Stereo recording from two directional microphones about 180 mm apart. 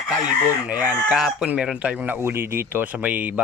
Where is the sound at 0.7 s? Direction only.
10° right (ahead or behind).